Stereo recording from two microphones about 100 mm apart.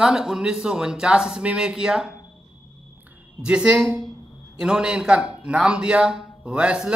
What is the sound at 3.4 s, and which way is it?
A man's voice, 10° right (ahead or behind).